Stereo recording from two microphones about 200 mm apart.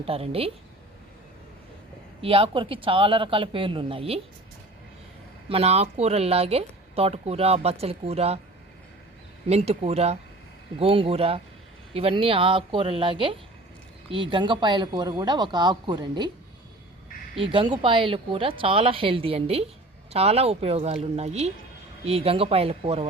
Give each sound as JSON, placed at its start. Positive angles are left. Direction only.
{"t": 0.0, "sound": "a woman's voice", "side_deg": -30}
{"t": 2.2, "sound": "a woman's voice", "side_deg": -25}
{"t": 5.5, "sound": "speech", "side_deg": -30}
{"t": 9.5, "sound": "a woman's voice", "side_deg": -30}
{"t": 17.4, "sound": "a woman's voice", "side_deg": -25}